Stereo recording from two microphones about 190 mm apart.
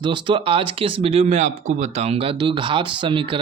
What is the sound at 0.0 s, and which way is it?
Speech, 25° right (ahead or behind).